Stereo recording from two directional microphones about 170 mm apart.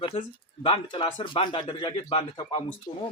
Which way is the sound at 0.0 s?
30° left (ahead or behind).